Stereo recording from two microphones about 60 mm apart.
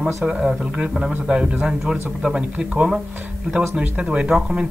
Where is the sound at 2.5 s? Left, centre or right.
Centre.